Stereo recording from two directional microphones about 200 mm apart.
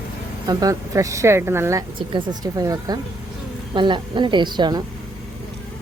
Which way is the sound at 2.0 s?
25° right (ahead or behind).